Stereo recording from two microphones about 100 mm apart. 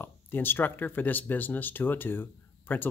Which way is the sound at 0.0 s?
20° left (ahead or behind).